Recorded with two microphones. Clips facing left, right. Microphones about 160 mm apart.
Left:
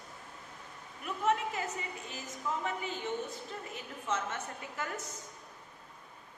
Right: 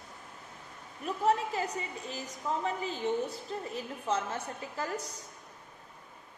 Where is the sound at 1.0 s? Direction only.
35° right (ahead or behind).